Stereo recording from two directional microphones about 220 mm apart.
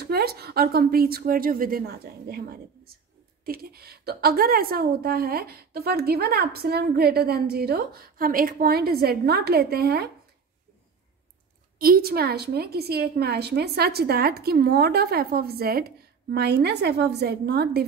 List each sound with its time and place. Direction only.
0.0 s a woman's voice: 45° right (ahead or behind)
11.8 s a woman's voice: 45° right (ahead or behind)